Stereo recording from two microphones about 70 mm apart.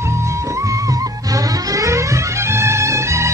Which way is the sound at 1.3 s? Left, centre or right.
Right.